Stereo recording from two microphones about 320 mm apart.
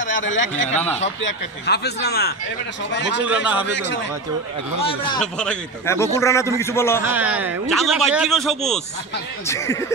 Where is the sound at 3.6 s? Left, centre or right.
Left.